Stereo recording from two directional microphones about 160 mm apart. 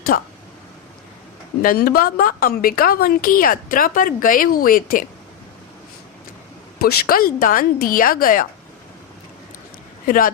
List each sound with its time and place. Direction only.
0.1 s speech: 70° left (ahead or behind)
1.6 s a woman's voice: 70° left (ahead or behind)
6.7 s a woman's voice: 70° left (ahead or behind)
10.1 s a woman's voice: 60° left (ahead or behind)